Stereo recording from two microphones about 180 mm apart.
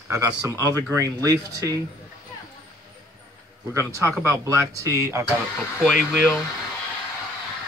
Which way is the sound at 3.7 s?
15° right (ahead or behind).